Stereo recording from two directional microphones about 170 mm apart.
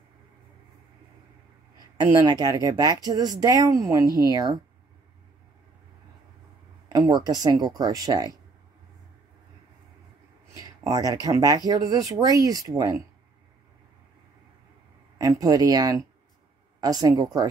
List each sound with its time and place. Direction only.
2.0 s speech: 25° right (ahead or behind)
6.9 s speech: 25° right (ahead or behind)
10.5 s a sound: 20° right (ahead or behind)
11.2 s speech: 20° right (ahead or behind)
15.1 s speech: 20° right (ahead or behind)